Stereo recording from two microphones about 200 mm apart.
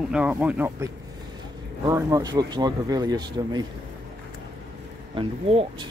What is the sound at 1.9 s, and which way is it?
Speech, 15° right (ahead or behind).